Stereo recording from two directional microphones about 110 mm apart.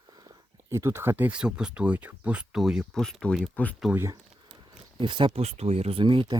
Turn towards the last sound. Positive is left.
turn(degrees=-45)  # may be behind; listen again after turning